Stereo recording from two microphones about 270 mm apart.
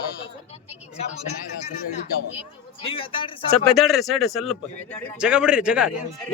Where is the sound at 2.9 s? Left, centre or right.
Centre.